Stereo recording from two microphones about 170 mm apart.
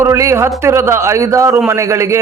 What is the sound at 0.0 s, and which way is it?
A man's voice, 15° right (ahead or behind).